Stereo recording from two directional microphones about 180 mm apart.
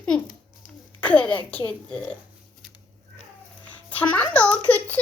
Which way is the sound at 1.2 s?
25° left (ahead or behind).